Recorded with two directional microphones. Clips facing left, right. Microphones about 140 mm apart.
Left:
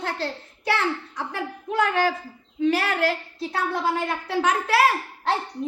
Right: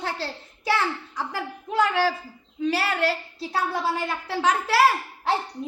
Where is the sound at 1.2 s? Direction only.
Centre (ahead or behind).